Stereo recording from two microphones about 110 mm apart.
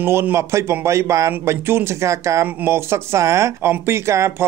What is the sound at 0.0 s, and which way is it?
Speech, 20° right (ahead or behind).